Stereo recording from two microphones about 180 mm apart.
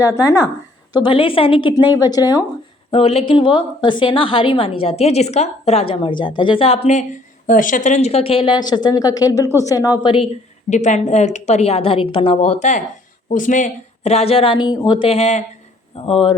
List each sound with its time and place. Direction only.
0.0 s speech: 15° left (ahead or behind)
0.9 s a woman's voice: 25° left (ahead or behind)
2.9 s a woman's voice: 35° left (ahead or behind)
7.4 s a woman's voice: 45° left (ahead or behind); by 10.2 s 25° left (ahead or behind)
10.7 s a woman's voice: 40° left (ahead or behind)